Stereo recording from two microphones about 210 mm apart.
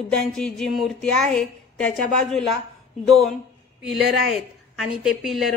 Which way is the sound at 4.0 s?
50° right (ahead or behind).